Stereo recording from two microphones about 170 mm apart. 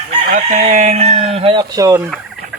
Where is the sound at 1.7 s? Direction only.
20° right (ahead or behind).